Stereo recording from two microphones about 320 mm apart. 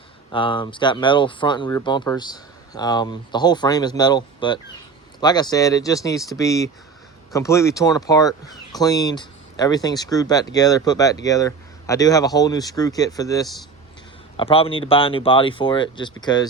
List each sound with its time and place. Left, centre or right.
0.3 s speech: centre